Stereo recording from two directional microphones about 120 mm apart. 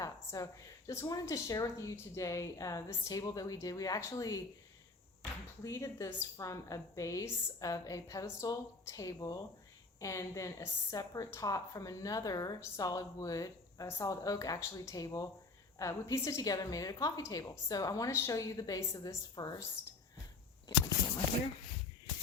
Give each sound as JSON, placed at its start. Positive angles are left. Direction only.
{"t": 0.0, "sound": "a woman's voice", "side_deg": 30}
{"t": 5.6, "sound": "a woman's voice", "side_deg": 25}